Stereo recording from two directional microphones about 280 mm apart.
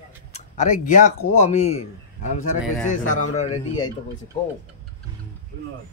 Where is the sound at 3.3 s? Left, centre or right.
Left.